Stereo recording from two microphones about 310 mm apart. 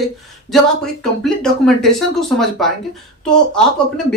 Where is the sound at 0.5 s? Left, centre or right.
Centre.